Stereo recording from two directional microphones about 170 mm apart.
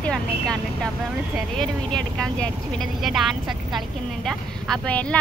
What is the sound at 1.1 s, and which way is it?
Speech, centre (ahead or behind).